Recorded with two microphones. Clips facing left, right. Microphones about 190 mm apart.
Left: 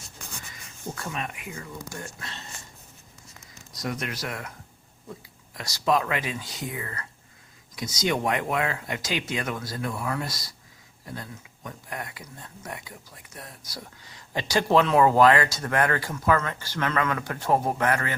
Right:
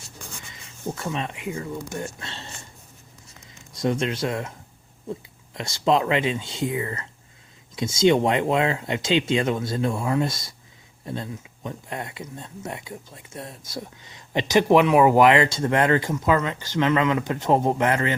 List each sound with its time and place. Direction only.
0.5 s speech: 25° right (ahead or behind)
3.8 s speech: 25° right (ahead or behind)
5.5 s speech: 25° right (ahead or behind)